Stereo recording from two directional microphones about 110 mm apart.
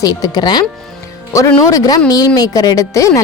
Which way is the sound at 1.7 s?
35° left (ahead or behind).